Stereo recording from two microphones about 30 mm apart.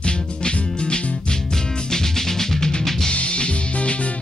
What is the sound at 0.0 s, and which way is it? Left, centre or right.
Music, left.